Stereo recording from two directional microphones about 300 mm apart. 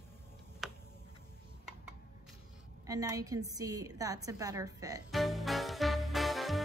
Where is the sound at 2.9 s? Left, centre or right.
Centre.